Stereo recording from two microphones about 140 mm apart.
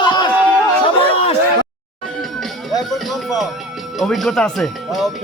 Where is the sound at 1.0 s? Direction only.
45° left (ahead or behind).